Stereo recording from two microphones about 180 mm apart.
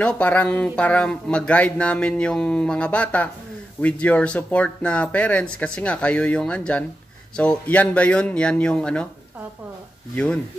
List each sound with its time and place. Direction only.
0.0 s speech: 10° left (ahead or behind)
10.1 s speech: 5° left (ahead or behind)